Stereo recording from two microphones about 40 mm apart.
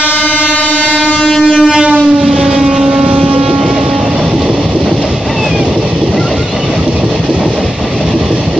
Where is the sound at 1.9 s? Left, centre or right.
Right.